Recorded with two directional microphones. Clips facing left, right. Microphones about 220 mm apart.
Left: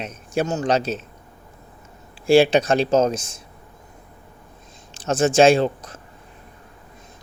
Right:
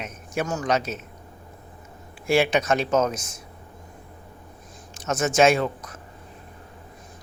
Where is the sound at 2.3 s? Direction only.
30° left (ahead or behind).